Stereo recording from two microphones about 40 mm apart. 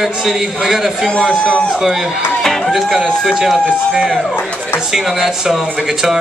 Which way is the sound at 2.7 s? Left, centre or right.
Centre.